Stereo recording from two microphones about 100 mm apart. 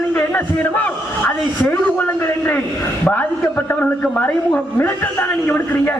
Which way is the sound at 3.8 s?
15° left (ahead or behind).